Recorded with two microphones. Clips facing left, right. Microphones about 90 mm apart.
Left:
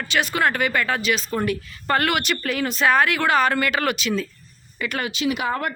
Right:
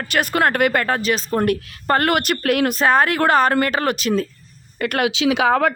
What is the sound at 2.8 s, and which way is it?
Speech, 40° right (ahead or behind).